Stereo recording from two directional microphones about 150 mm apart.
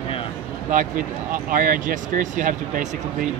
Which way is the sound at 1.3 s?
65° right (ahead or behind).